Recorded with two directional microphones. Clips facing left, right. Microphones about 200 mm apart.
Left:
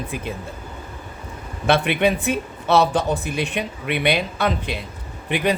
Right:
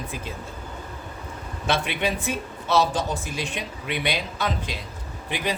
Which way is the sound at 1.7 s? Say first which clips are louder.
Left 7 dB; 60° left (ahead or behind).